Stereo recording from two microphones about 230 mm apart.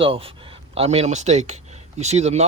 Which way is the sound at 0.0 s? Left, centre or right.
Right.